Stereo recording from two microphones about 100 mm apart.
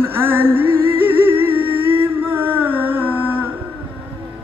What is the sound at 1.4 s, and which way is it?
Humming, 20° right (ahead or behind).